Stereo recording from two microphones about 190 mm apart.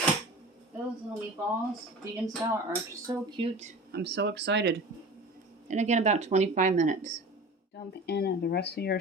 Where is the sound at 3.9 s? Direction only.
65° right (ahead or behind).